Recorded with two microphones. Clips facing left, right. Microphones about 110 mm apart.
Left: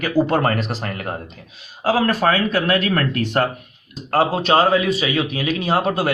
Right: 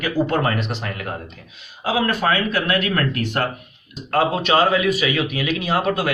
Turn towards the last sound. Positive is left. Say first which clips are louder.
# left 1 dB
turn(degrees=30)  # may be behind; listen again after turning